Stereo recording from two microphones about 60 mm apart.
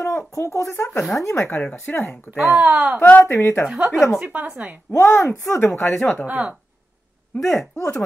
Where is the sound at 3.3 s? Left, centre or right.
Left.